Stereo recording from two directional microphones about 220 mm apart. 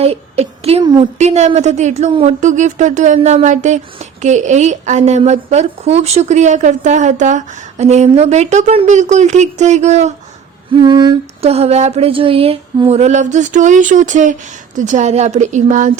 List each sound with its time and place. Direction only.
0.0 s a woman's voice: 25° right (ahead or behind)
10.7 s a sound: 20° right (ahead or behind); by 14.3 s 35° right (ahead or behind)
14.8 s a woman's voice: 35° right (ahead or behind)